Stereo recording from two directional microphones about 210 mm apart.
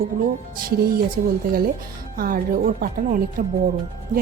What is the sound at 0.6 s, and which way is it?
Speech, 45° right (ahead or behind).